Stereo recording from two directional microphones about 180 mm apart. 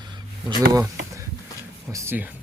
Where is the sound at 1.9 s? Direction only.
15° right (ahead or behind).